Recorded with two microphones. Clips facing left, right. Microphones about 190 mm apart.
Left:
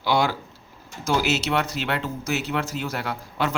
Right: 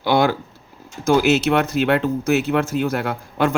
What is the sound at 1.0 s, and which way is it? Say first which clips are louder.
Speech: right 8 dB; 55° right (ahead or behind).